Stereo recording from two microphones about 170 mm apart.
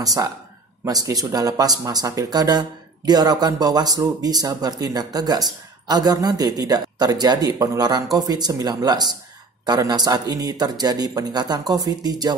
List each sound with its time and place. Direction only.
0.0 s speech: 20° right (ahead or behind)